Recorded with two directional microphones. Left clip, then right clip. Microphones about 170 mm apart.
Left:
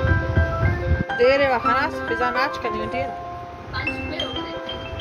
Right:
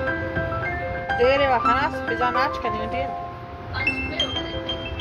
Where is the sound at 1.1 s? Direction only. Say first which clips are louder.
Left 1 dB; 15° left (ahead or behind).